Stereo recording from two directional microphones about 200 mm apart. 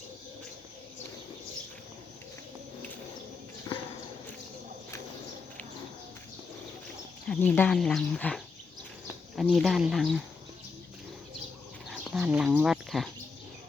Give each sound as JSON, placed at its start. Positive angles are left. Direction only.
{"t": 3.7, "sound": "clip-clop", "side_deg": 20}
{"t": 7.3, "sound": "speech", "side_deg": 10}
{"t": 11.9, "sound": "a sound", "side_deg": -5}